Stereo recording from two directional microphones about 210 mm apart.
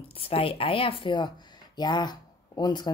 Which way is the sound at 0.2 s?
25° left (ahead or behind).